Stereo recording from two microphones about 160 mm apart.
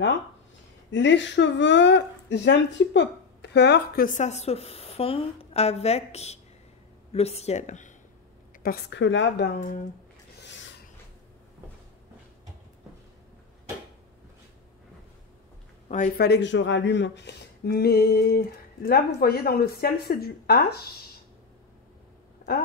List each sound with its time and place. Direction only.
0.9 s speech: 90° left; by 7.9 s 50° left (ahead or behind)
8.6 s speech: 85° left
16.2 s speech: 90° left